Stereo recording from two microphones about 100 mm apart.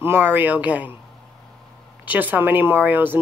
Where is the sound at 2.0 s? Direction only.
20° right (ahead or behind).